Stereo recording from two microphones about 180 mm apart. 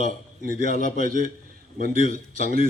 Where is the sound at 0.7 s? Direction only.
40° left (ahead or behind).